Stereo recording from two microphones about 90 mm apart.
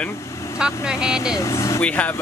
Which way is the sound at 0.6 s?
10° right (ahead or behind).